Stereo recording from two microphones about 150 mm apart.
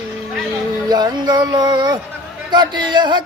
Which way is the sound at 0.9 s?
25° right (ahead or behind).